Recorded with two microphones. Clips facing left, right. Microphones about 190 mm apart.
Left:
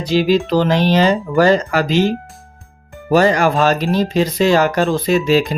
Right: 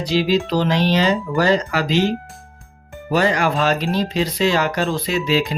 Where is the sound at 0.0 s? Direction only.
50° left (ahead or behind).